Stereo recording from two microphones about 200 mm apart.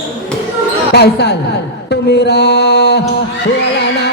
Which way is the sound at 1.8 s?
55° left (ahead or behind).